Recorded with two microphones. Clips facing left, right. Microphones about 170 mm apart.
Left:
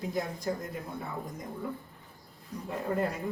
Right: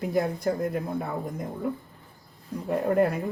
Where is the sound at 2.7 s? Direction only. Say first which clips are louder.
Right 9 dB; 60° right (ahead or behind).